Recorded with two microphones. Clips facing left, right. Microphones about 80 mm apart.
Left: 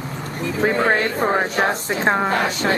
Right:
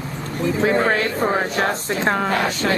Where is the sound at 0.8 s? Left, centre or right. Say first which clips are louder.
Left 1 dB; left.